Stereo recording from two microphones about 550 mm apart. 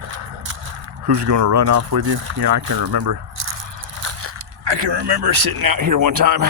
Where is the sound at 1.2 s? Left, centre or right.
Right.